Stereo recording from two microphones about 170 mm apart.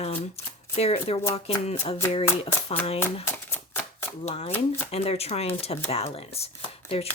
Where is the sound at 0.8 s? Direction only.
35° left (ahead or behind).